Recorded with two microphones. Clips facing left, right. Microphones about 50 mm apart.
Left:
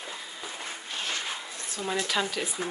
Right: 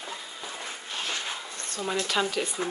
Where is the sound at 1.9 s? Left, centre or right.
Centre.